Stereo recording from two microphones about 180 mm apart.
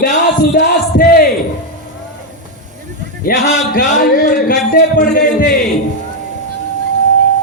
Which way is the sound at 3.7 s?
45° left (ahead or behind).